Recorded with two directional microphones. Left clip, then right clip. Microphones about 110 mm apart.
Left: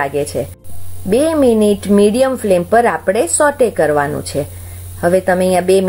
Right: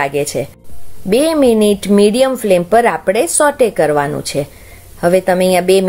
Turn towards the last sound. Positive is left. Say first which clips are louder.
# right 1 dB
turn(degrees=-20)  # may be behind; listen again after turning